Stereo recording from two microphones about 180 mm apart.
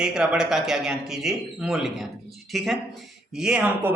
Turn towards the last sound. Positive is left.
turn(degrees=-5)  # may be behind; listen again after turning